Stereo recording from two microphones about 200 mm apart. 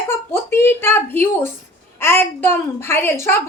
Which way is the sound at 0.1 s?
10° left (ahead or behind).